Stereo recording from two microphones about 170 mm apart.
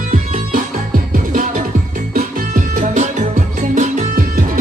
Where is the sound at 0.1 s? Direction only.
50° right (ahead or behind).